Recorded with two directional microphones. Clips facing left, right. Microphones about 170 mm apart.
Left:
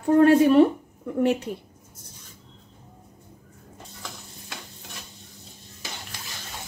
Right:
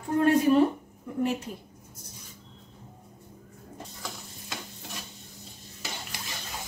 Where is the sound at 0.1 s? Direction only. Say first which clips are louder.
Left 6 dB; 65° left (ahead or behind).